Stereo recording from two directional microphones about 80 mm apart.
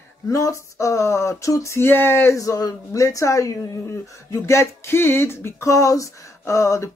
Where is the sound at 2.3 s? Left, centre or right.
Left.